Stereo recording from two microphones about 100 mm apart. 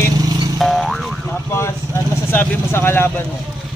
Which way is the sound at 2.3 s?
25° left (ahead or behind).